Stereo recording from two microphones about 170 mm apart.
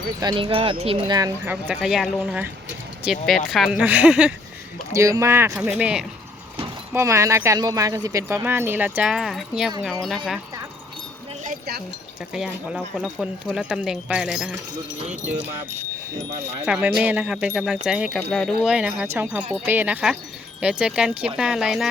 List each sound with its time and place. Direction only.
0.2 s speech: 30° right (ahead or behind)
1.5 s speech: 10° right (ahead or behind)
4.9 s speech: 20° right (ahead or behind)
6.9 s speech: 15° right (ahead or behind)
11.4 s a sound: 65° right (ahead or behind)
12.3 s speech: 5° right (ahead or behind)
16.6 s speech: 5° right (ahead or behind)